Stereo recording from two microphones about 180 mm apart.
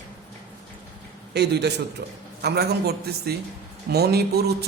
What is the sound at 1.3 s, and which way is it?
A man's voice, 65° right (ahead or behind).